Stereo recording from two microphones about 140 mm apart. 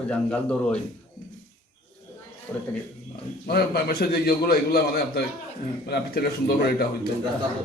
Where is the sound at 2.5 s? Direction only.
10° left (ahead or behind).